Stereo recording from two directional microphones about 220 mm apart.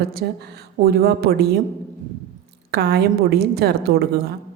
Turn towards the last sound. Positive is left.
turn(degrees=-45)  # may be behind; listen again after turning